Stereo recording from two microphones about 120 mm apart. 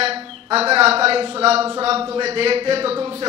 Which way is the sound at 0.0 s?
55° right (ahead or behind).